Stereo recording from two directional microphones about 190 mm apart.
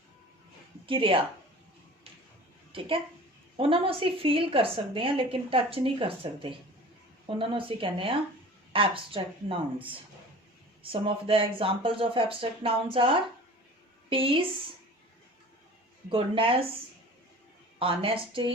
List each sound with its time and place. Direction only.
0.9 s a woman's voice: 25° right (ahead or behind)
2.7 s a woman's voice: 30° right (ahead or behind)
10.9 s a woman's voice: 30° right (ahead or behind)
16.0 s a woman's voice: 25° right (ahead or behind)
17.7 s a woman's voice: 30° right (ahead or behind)